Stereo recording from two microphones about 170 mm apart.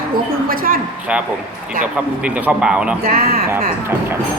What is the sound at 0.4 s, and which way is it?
Speech, 55° right (ahead or behind).